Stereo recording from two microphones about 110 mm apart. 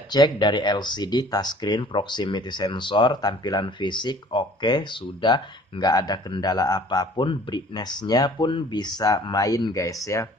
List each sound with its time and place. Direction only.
0.1 s speech: 40° left (ahead or behind)